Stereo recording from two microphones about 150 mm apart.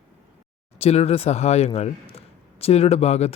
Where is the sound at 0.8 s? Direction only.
45° left (ahead or behind).